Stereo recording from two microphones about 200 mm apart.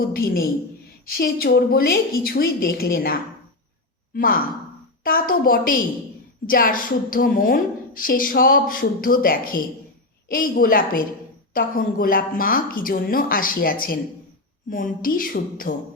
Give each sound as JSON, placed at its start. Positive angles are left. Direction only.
{"t": 0.0, "sound": "a woman's voice", "side_deg": 50}